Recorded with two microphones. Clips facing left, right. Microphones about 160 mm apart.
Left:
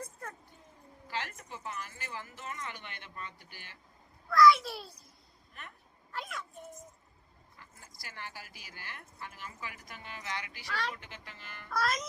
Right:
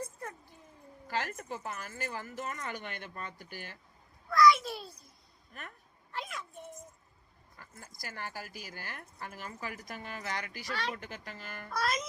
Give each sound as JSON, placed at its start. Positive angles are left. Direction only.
{"t": 1.0, "sound": "speech", "side_deg": -45}
{"t": 4.3, "sound": "a child's voice", "side_deg": 0}
{"t": 5.5, "sound": "speech", "side_deg": -45}
{"t": 6.1, "sound": "a sound", "side_deg": 0}
{"t": 7.6, "sound": "speech", "side_deg": -45}
{"t": 11.7, "sound": "music", "side_deg": 0}